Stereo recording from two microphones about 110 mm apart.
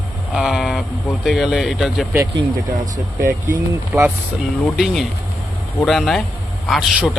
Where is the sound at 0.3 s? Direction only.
5° right (ahead or behind).